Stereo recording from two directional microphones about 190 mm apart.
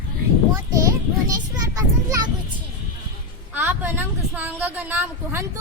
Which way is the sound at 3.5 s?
10° right (ahead or behind).